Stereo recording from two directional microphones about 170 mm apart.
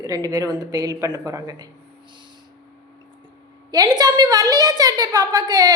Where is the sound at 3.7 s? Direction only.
20° right (ahead or behind).